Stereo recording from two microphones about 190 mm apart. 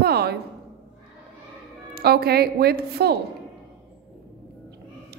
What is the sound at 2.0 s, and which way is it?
A woman's voice, 55° right (ahead or behind).